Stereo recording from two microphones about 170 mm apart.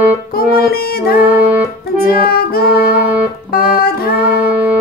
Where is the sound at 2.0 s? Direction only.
60° left (ahead or behind).